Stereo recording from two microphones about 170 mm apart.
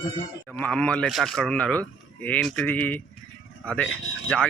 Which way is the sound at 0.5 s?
10° left (ahead or behind).